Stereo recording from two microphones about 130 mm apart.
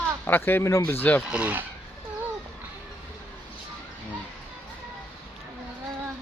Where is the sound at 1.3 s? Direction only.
10° right (ahead or behind).